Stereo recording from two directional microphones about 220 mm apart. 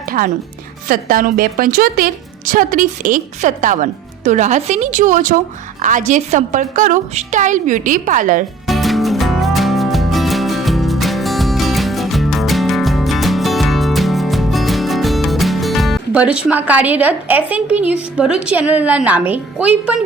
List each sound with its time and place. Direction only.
0.9 s a woman's voice: 40° right (ahead or behind)
8.6 s music: centre (ahead or behind)
16.5 s a woman's voice: 5° right (ahead or behind)